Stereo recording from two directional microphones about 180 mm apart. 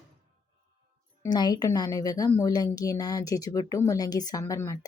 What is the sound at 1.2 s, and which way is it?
A woman's voice, 25° left (ahead or behind).